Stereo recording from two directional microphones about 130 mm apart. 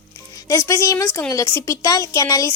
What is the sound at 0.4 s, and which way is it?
Speech, 25° left (ahead or behind).